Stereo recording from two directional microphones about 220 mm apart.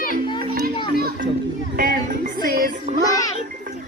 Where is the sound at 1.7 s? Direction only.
40° right (ahead or behind).